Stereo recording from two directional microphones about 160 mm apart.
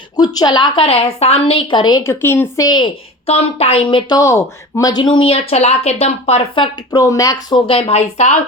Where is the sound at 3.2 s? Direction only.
40° left (ahead or behind).